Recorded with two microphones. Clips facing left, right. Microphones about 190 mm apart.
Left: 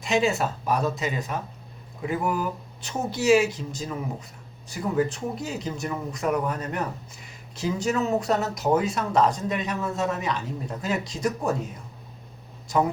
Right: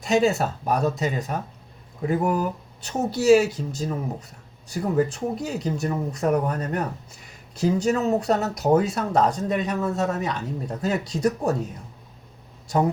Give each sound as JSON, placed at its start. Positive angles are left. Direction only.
{"t": 0.0, "sound": "speech", "side_deg": -40}